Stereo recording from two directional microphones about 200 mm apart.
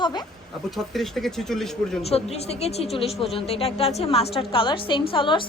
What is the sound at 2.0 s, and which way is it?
A woman's voice, 30° left (ahead or behind).